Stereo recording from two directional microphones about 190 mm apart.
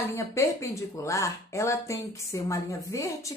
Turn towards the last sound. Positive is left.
turn(degrees=15)  # may be behind; listen again after turning